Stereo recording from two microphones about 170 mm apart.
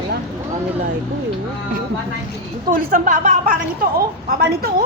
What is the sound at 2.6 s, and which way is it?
A woman's voice, 55° right (ahead or behind).